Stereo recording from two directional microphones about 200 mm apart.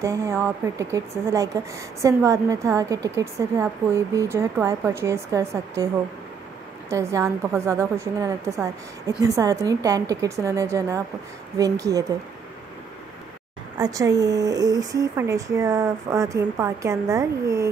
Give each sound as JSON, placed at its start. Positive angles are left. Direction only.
{"t": 0.0, "sound": "speech", "side_deg": -15}
{"t": 6.9, "sound": "speech", "side_deg": -15}
{"t": 13.7, "sound": "speech", "side_deg": -15}